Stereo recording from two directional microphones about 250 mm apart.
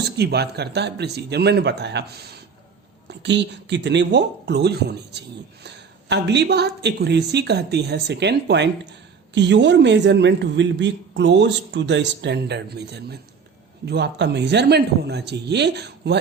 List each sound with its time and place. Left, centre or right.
0.2 s a woman's voice: right